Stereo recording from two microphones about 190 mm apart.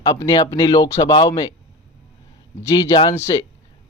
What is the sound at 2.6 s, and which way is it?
Speech, 15° left (ahead or behind).